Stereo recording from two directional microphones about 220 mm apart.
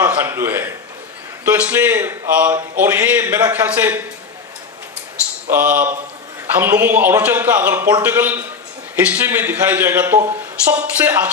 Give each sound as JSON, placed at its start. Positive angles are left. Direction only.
{"t": 0.0, "sound": "a sound", "side_deg": -10}
{"t": 1.4, "sound": "speech", "side_deg": -10}
{"t": 5.5, "sound": "speech", "side_deg": -5}